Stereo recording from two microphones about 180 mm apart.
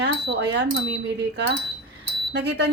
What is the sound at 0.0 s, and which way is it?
Speech, 70° right (ahead or behind).